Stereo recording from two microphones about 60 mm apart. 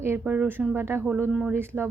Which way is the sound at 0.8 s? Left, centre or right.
Right.